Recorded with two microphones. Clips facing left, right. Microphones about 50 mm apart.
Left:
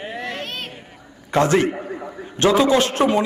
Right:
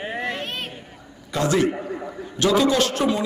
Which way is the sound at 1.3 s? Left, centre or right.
Left.